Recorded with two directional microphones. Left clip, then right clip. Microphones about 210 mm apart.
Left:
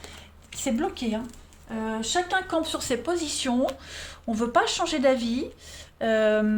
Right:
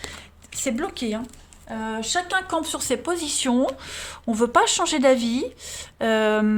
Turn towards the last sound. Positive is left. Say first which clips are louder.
# right 2 dB
turn(degrees=-35)  # may be behind; listen again after turning